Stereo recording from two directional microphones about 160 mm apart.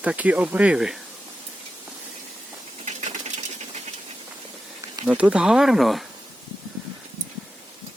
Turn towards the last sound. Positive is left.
turn(degrees=0)  # may be behind; listen again after turning